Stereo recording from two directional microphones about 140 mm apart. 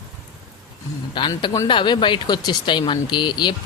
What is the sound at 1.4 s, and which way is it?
Speech, 25° left (ahead or behind).